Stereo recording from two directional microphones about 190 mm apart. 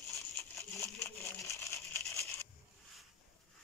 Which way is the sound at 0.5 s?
15° left (ahead or behind).